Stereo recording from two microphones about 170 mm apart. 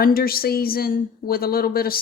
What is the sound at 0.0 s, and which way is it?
Speech, 60° left (ahead or behind).